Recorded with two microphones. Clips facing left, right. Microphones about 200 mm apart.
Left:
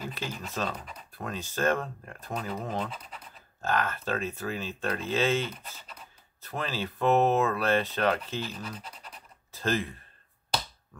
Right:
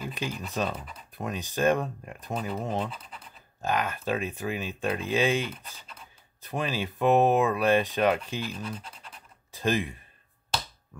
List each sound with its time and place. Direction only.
0.1 s speech: 15° right (ahead or behind)
8.5 s speech: centre (ahead or behind)
9.5 s speech: 15° right (ahead or behind)